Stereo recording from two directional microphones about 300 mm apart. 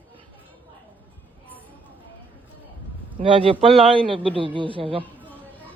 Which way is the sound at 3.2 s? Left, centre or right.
Centre.